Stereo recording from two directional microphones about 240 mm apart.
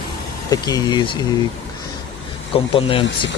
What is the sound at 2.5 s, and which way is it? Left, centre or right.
Speech, left.